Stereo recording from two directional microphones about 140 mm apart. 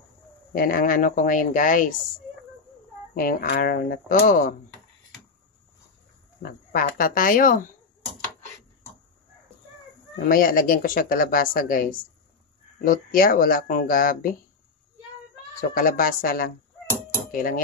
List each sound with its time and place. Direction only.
0.5 s speech: 90° left; by 2.0 s 70° left (ahead or behind)
3.2 s speech: 90° left
6.7 s speech: 80° left
10.1 s speech: 90° left
15.7 s speech: 90° left
17.3 s cutlery: 85° left